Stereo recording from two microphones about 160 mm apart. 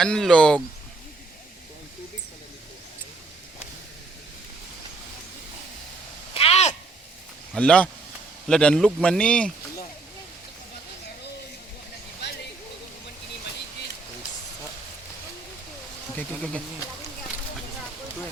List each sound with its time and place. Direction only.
0.0 s speech: 5° left (ahead or behind)
6.3 s a sound: 40° left (ahead or behind)
7.5 s speech: 5° left (ahead or behind)
16.1 s speech: 5° left (ahead or behind)